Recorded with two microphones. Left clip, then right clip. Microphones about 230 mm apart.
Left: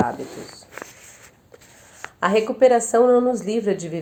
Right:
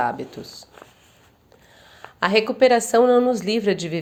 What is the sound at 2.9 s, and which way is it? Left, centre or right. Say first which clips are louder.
Speech: even; right.